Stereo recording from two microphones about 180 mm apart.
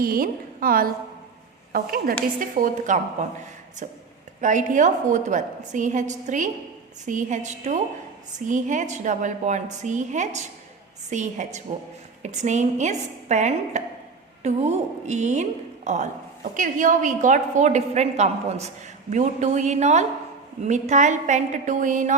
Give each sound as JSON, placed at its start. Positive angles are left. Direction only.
{"t": 0.0, "sound": "a woman's voice", "side_deg": -55}
{"t": 4.4, "sound": "a woman's voice", "side_deg": -45}